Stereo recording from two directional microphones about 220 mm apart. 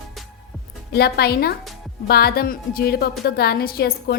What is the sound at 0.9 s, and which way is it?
A woman's voice, 45° left (ahead or behind).